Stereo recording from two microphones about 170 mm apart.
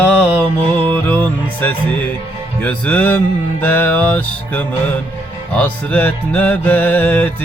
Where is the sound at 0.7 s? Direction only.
10° left (ahead or behind).